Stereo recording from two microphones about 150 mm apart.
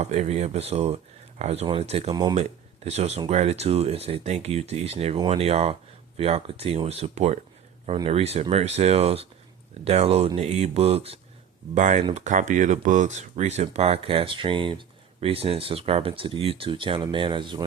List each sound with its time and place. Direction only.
0.0 s speech: 45° right (ahead or behind)
11.7 s speech: 50° right (ahead or behind); by 17.6 s 35° right (ahead or behind)